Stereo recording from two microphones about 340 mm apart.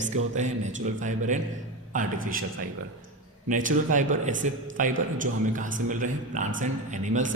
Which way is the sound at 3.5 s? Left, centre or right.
Right.